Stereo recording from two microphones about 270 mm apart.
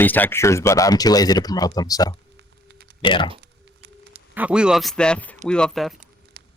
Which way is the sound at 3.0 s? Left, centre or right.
Centre.